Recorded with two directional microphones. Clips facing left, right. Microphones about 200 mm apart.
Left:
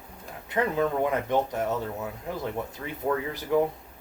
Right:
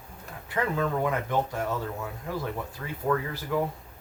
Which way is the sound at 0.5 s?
20° left (ahead or behind).